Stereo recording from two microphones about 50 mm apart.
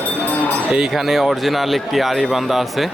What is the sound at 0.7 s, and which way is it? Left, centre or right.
Speech, centre.